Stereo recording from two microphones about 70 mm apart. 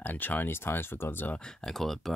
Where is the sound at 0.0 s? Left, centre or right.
Left.